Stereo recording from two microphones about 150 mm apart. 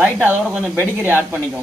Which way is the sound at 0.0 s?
15° right (ahead or behind).